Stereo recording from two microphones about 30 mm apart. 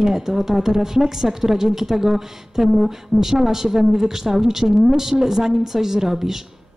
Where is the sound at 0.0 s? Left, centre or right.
Centre.